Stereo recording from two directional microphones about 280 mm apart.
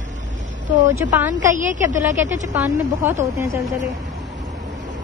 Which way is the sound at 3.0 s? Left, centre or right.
Centre.